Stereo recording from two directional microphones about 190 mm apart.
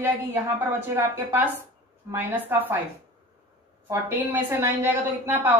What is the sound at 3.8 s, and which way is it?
A woman's voice, 10° right (ahead or behind).